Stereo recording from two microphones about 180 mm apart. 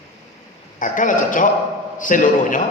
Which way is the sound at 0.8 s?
45° left (ahead or behind).